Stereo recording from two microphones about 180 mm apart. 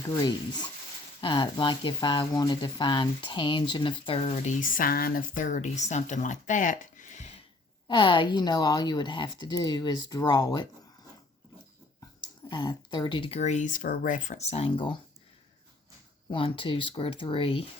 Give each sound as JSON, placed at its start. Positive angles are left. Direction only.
{"t": 1.2, "sound": "speech", "side_deg": 25}
{"t": 7.9, "sound": "speech", "side_deg": 25}
{"t": 12.2, "sound": "speech", "side_deg": 25}
{"t": 16.3, "sound": "speech", "side_deg": 30}